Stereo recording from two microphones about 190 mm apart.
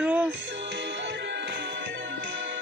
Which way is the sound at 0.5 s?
70° right (ahead or behind).